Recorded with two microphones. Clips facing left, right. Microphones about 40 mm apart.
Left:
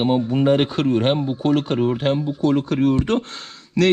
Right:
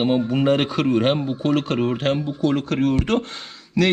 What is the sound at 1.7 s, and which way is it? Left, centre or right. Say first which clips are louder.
Speech: left 2 dB; right.